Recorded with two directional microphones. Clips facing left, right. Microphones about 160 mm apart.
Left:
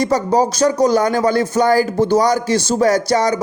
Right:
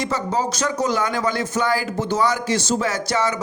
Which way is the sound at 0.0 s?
40° left (ahead or behind).